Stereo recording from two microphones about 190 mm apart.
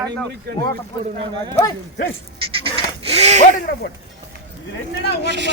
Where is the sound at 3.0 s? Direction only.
35° right (ahead or behind).